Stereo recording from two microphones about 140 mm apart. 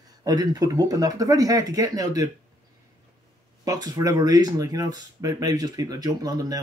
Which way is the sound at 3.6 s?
25° right (ahead or behind).